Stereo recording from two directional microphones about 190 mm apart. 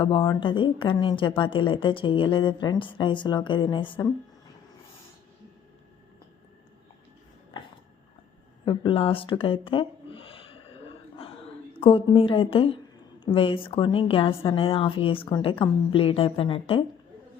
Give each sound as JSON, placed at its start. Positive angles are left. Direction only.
{"t": 0.0, "sound": "a woman's voice", "side_deg": 25}
{"t": 8.6, "sound": "speech", "side_deg": 25}
{"t": 11.8, "sound": "a woman's voice", "side_deg": 30}